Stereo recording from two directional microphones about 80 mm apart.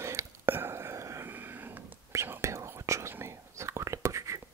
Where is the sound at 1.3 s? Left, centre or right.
Right.